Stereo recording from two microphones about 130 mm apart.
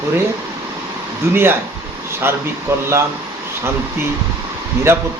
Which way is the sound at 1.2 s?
15° right (ahead or behind).